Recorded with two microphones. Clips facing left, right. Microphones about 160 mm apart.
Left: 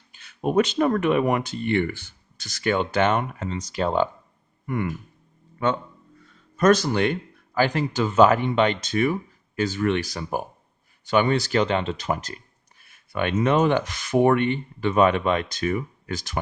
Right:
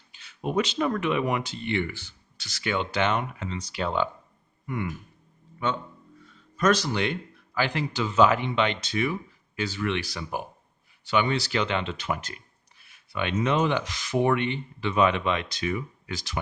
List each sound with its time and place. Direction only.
0.1 s speech: 50° left (ahead or behind)
4.6 s speech: 50° left (ahead or behind)
6.6 s speech: 50° left (ahead or behind)